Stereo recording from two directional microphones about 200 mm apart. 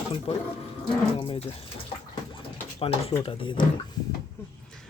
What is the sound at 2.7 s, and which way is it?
Speech, 30° left (ahead or behind).